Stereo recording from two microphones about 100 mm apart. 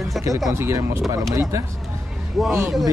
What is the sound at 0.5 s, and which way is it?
Speech, 30° right (ahead or behind).